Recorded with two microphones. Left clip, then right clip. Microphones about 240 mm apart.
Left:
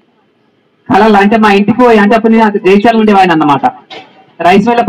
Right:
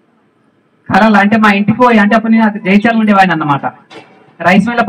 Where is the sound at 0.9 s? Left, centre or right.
Left.